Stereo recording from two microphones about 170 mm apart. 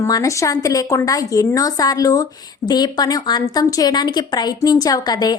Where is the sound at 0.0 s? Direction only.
20° left (ahead or behind).